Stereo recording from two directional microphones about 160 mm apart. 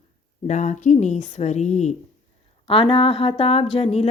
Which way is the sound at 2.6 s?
35° left (ahead or behind).